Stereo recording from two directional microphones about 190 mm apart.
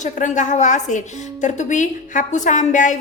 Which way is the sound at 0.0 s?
40° left (ahead or behind).